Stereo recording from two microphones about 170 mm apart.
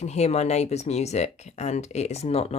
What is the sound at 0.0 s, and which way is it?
Speech, 40° left (ahead or behind).